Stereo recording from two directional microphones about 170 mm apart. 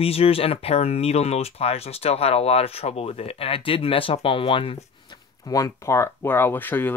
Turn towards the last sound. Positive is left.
turn(degrees=10)  # may be behind; listen again after turning